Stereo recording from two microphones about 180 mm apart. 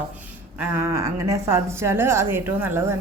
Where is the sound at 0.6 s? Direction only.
15° right (ahead or behind).